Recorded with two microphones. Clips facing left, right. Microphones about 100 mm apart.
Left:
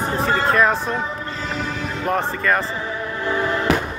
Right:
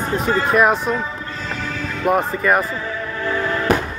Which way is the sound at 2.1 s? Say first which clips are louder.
Right 4 dB; 10° right (ahead or behind).